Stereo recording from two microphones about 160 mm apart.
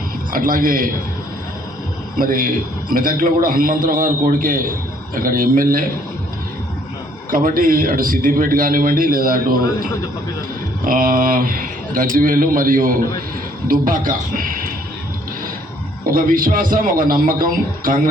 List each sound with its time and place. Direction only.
0.3 s a man's voice: 60° right (ahead or behind)
2.1 s a man's voice: 60° right (ahead or behind)
7.3 s a man's voice: 60° right (ahead or behind)
16.0 s a man's voice: 60° right (ahead or behind)